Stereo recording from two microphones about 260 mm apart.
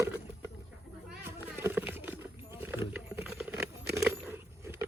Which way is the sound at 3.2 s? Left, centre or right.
Centre.